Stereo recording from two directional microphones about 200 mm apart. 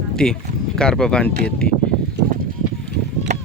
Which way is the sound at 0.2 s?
5° left (ahead or behind).